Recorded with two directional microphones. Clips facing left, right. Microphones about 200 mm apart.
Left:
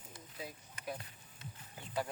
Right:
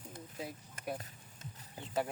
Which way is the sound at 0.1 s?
50° right (ahead or behind).